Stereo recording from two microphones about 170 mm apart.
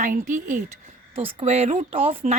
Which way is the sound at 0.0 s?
50° right (ahead or behind).